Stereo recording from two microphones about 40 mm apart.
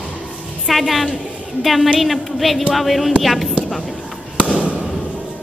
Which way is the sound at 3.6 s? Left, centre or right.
Centre.